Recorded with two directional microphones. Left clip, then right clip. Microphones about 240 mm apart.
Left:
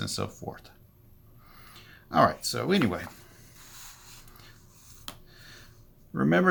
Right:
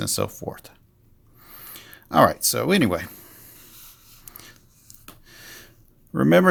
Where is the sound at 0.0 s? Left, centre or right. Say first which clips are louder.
Right 7 dB; right.